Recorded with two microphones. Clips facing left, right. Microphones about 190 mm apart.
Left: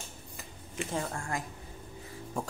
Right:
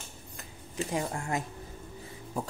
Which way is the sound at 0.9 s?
15° right (ahead or behind).